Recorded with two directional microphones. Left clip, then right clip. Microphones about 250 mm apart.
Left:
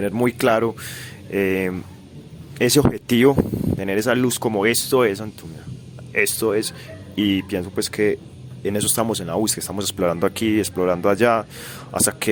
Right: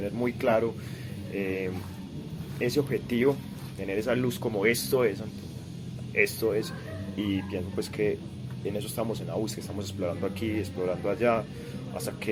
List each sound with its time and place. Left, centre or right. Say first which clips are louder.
0.0 s speech: left 9 dB; left